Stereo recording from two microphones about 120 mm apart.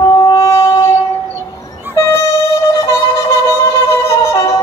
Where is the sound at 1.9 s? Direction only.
25° left (ahead or behind).